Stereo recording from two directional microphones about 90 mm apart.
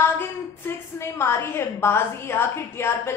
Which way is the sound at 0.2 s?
30° left (ahead or behind).